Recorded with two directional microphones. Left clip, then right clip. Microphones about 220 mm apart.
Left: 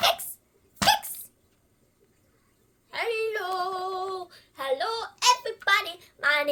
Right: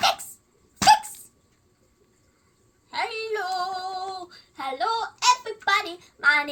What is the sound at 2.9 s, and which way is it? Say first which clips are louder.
Female singing: even; 45° left (ahead or behind).